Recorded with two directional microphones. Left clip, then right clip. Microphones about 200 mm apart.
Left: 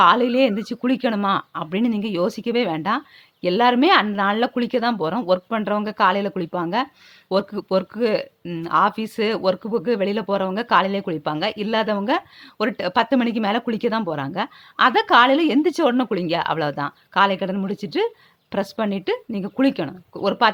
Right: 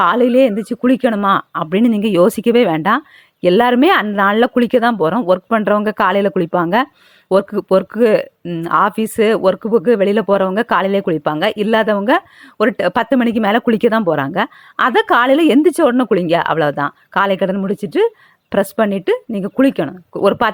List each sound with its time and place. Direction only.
0.0 s speech: 25° right (ahead or behind)